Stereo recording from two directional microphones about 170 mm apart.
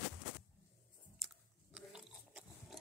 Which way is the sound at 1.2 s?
5° right (ahead or behind).